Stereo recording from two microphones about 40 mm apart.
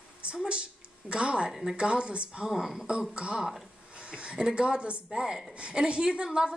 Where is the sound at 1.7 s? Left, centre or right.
Right.